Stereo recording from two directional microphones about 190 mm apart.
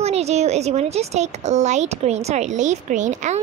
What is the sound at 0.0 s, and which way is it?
Speech, 35° right (ahead or behind).